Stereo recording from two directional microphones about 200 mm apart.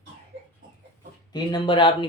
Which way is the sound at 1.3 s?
20° left (ahead or behind).